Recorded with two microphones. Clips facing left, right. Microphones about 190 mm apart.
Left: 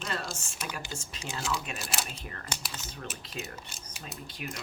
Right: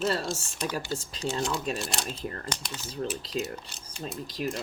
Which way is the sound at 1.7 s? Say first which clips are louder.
Right 4 dB; 5° left (ahead or behind).